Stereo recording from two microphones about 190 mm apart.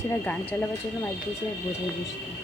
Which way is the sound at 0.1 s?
10° left (ahead or behind).